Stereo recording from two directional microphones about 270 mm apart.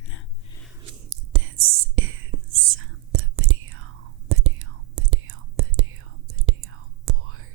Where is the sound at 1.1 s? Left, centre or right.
Right.